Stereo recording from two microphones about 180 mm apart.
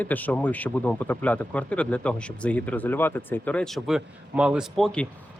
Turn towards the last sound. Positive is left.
turn(degrees=5)  # may be behind; listen again after turning